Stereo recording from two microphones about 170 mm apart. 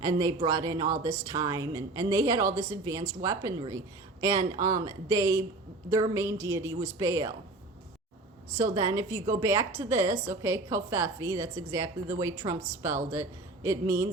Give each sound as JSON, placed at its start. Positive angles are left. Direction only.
{"t": 0.0, "sound": "a woman's voice", "side_deg": -20}
{"t": 8.6, "sound": "a woman's voice", "side_deg": -20}